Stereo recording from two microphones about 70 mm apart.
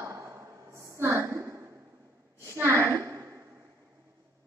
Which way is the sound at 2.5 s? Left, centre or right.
Right.